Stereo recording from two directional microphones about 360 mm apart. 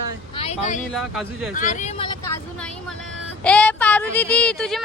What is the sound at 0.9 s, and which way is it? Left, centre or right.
Speech, centre.